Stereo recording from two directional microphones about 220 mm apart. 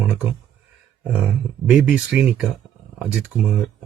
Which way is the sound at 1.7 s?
5° right (ahead or behind).